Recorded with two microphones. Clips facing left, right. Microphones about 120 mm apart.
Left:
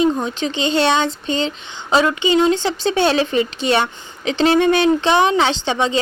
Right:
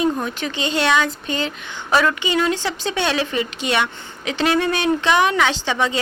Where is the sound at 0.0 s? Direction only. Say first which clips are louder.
Left 3 dB; 25° left (ahead or behind).